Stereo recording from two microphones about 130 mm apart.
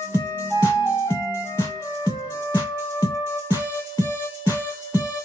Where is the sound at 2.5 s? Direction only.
20° left (ahead or behind).